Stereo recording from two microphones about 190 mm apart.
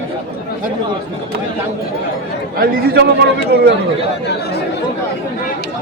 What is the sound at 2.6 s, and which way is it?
Speech, 55° right (ahead or behind).